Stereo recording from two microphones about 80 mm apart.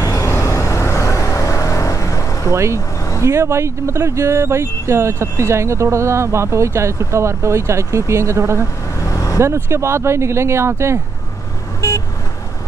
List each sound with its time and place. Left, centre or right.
0.0 s music: left
2.5 s speech: right
9.0 s vehicle: left
9.4 s speech: right